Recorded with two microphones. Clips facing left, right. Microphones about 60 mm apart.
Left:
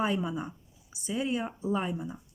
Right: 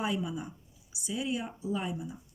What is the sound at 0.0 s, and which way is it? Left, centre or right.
Speech, left.